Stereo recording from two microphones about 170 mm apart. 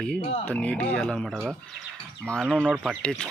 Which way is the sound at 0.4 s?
5° left (ahead or behind).